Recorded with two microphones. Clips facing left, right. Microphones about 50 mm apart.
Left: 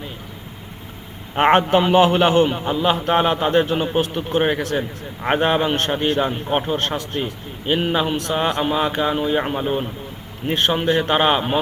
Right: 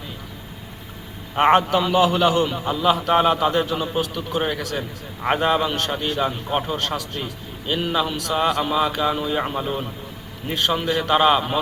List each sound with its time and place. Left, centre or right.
1.4 s a man's voice: left